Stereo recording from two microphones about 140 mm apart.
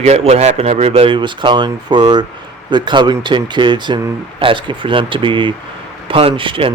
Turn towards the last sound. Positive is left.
turn(degrees=-40)  # may be behind; listen again after turning